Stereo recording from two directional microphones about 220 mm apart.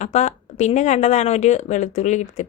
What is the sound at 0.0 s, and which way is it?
Speech, 30° left (ahead or behind).